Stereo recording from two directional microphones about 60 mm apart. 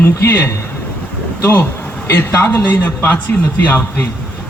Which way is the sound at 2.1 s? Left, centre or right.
Left.